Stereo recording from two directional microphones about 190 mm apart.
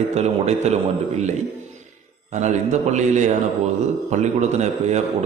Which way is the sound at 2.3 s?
40° right (ahead or behind).